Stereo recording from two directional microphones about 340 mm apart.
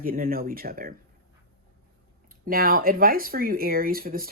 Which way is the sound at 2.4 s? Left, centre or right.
Right.